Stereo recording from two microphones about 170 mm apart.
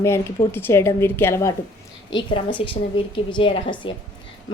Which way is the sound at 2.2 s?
30° left (ahead or behind).